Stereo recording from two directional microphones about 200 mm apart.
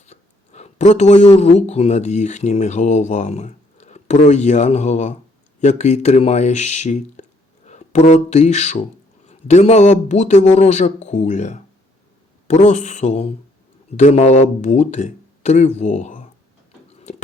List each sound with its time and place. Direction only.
0.0 s speech: 35° left (ahead or behind)